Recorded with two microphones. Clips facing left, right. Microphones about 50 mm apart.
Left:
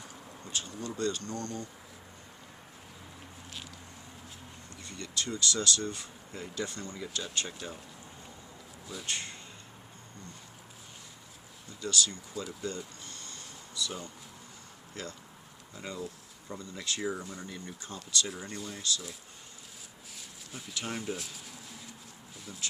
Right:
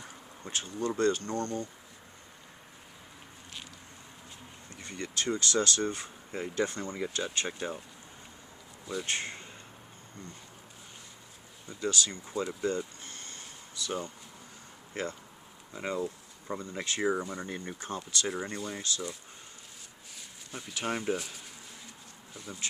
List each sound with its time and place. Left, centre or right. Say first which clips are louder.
0.4 s speech: right 5 dB; right
4.8 s speech: right 3 dB; right
9.0 s speech: even; right
11.8 s speech: right 1 dB; right
13.1 s a sound: right 1 dB; right
15.0 s speech: right 6 dB; right
18.3 s speech: right 5 dB; centre
18.8 s speech: even; right
20.1 s a sound: right 3 dB; centre
20.7 s speech: right 5 dB; centre